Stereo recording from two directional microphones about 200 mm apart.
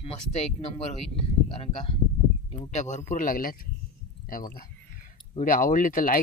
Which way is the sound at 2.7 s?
35° left (ahead or behind).